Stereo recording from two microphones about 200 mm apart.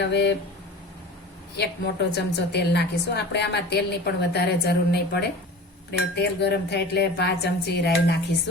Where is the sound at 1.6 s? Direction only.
55° left (ahead or behind).